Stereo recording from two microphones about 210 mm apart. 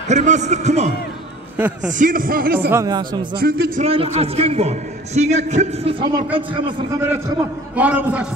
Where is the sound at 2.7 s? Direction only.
15° right (ahead or behind).